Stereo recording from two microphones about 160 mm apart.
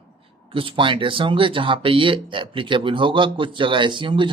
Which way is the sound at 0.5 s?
35° right (ahead or behind).